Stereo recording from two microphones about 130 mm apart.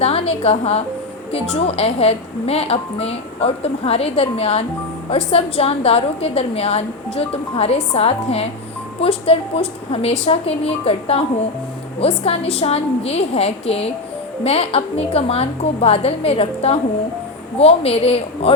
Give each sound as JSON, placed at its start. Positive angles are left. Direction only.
{"t": 0.0, "sound": "a woman's voice", "side_deg": 50}